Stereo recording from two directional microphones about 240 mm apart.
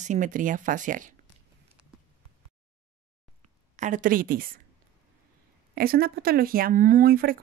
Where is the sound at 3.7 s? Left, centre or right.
Right.